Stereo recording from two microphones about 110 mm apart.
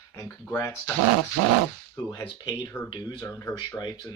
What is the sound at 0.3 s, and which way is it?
Speech, 15° left (ahead or behind).